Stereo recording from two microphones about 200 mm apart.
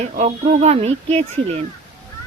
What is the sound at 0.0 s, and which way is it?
A woman's voice, 35° right (ahead or behind).